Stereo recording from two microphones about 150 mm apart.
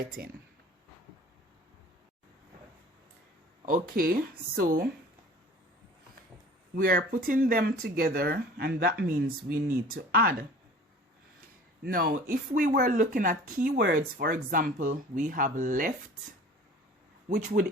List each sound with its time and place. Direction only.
0.2 s speech: 90° right
3.7 s speech: 75° right (ahead or behind)
6.7 s speech: 75° right (ahead or behind)
11.9 s speech: 75° right (ahead or behind)